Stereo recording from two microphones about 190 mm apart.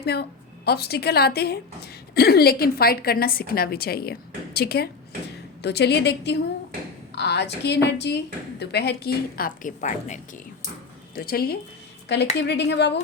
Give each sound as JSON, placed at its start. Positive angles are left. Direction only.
{"t": 0.0, "sound": "a woman's voice", "side_deg": 55}
{"t": 11.1, "sound": "speech", "side_deg": 50}
{"t": 12.0, "sound": "a woman's voice", "side_deg": 65}